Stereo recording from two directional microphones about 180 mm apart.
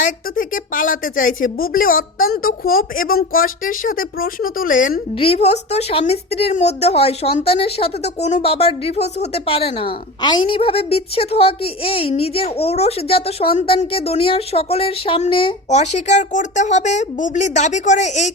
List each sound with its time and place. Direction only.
0.0 s speech: 50° left (ahead or behind)
5.1 s speech: 30° left (ahead or behind)